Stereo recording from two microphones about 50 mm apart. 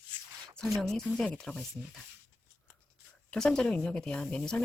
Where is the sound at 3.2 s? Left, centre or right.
Centre.